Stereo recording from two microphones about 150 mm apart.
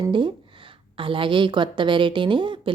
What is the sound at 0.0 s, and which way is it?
A woman's voice, 35° right (ahead or behind).